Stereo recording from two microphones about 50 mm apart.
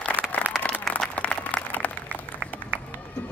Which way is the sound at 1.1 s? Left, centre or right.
Left.